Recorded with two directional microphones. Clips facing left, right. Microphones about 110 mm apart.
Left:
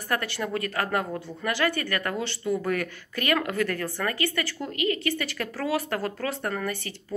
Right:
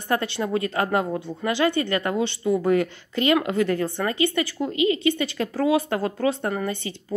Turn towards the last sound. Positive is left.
turn(degrees=-20)  # may be behind; listen again after turning